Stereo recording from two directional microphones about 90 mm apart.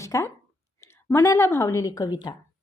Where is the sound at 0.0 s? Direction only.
35° left (ahead or behind).